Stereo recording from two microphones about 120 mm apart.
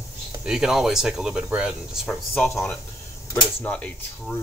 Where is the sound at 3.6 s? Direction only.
10° left (ahead or behind).